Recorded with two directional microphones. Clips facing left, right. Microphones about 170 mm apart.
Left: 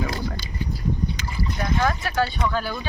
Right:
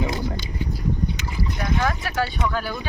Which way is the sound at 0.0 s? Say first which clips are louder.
Right 2 dB; 20° right (ahead or behind).